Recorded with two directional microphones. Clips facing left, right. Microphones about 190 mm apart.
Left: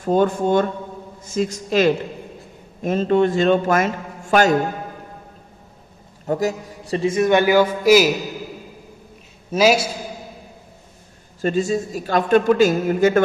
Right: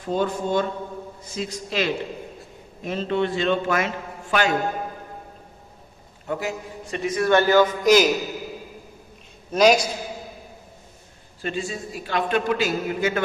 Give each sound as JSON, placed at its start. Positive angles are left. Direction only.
{"t": 0.0, "sound": "a man's voice", "side_deg": 50}
{"t": 6.2, "sound": "a man's voice", "side_deg": 40}
{"t": 9.5, "sound": "a man's voice", "side_deg": 5}
{"t": 11.4, "sound": "a man's voice", "side_deg": 40}